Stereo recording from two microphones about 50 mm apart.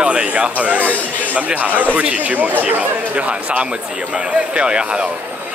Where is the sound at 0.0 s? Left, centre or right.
Right.